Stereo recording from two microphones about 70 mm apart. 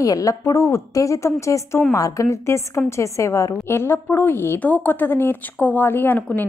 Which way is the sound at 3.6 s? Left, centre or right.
Left.